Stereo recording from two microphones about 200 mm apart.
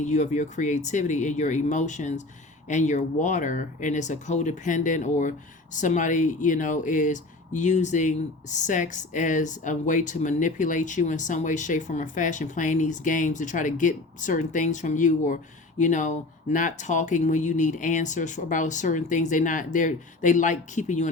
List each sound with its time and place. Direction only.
0.0 s speech: 35° left (ahead or behind)